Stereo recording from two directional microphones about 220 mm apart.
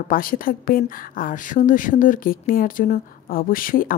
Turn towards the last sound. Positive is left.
turn(degrees=40)  # may be behind; listen again after turning